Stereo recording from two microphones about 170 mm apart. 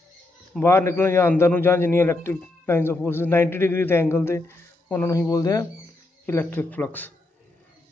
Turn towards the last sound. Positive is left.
turn(degrees=10)  # may be behind; listen again after turning